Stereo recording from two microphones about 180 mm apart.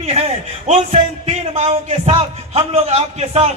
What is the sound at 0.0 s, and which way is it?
A man's voice, 35° right (ahead or behind).